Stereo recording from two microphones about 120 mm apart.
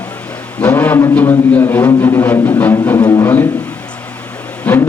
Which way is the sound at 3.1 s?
20° left (ahead or behind).